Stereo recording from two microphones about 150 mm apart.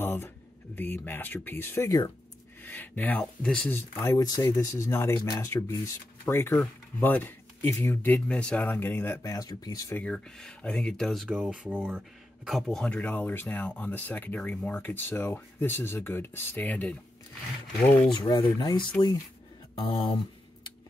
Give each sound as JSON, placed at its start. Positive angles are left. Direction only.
{"t": 0.0, "sound": "a sound", "side_deg": 15}
{"t": 0.7, "sound": "speech", "side_deg": 15}
{"t": 4.0, "sound": "speech", "side_deg": 15}
{"t": 9.9, "sound": "speech", "side_deg": 5}
{"t": 18.1, "sound": "speech", "side_deg": 30}